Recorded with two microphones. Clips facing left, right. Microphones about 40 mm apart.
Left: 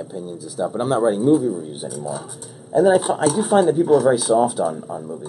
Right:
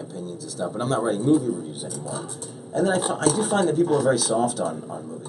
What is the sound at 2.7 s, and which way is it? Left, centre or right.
A man's voice, centre.